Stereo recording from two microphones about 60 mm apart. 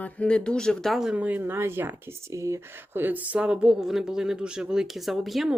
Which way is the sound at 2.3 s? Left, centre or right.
Right.